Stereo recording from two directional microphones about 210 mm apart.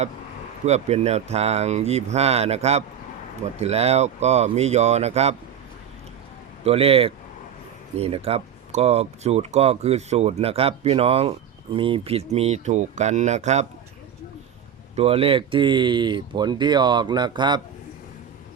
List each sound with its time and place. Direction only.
0.6 s speech: 30° right (ahead or behind)
6.7 s speech: 30° right (ahead or behind)
14.9 s speech: 30° right (ahead or behind)